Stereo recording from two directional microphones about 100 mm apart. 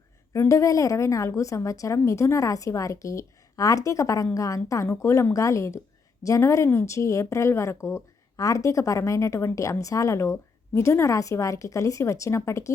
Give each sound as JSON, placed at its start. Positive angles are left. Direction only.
{"t": 0.3, "sound": "speech", "side_deg": 30}